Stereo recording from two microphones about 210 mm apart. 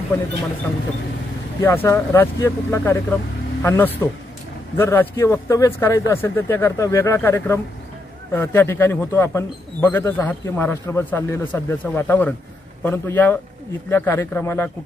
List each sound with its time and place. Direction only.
1.6 s speech: 10° left (ahead or behind)